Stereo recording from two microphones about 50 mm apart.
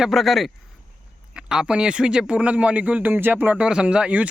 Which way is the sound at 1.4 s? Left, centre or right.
Centre.